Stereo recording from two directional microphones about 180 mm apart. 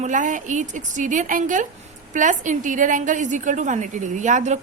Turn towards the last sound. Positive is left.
turn(degrees=-40)  # may be behind; listen again after turning